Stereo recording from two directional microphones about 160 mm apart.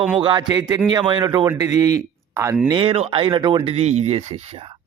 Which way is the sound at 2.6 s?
30° right (ahead or behind).